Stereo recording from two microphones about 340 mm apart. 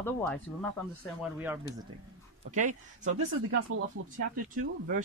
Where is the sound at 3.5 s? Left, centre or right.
Right.